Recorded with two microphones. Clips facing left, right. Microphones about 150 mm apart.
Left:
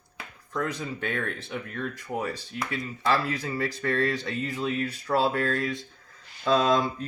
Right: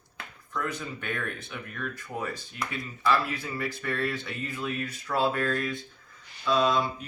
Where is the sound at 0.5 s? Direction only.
30° left (ahead or behind).